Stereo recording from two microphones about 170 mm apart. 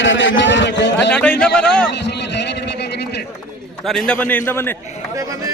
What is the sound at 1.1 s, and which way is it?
Speech, 10° left (ahead or behind).